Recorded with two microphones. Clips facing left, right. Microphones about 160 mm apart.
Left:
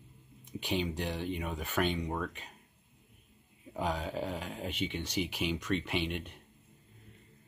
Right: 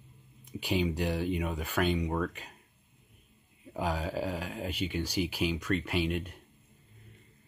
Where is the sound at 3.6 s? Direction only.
5° right (ahead or behind).